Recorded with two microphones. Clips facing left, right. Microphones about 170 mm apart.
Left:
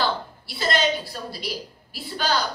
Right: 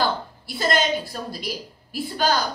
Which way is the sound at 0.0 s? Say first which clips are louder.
Right 1 dB; 45° right (ahead or behind).